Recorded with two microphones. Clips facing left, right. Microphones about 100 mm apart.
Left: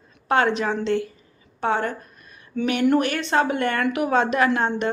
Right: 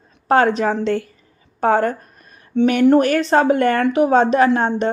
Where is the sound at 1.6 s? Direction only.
45° right (ahead or behind).